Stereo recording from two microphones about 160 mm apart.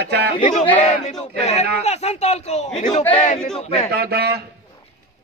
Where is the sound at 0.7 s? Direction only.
40° left (ahead or behind).